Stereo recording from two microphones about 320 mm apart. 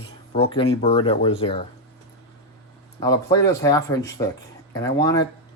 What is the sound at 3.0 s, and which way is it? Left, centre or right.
Speech, centre.